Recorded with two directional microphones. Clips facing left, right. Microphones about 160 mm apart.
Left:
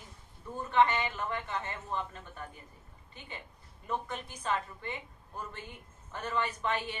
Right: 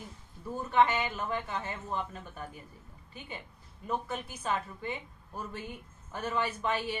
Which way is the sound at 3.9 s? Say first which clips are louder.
Right 2 dB; 5° right (ahead or behind).